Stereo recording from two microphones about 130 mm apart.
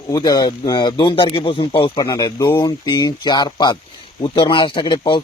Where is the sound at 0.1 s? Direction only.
30° left (ahead or behind).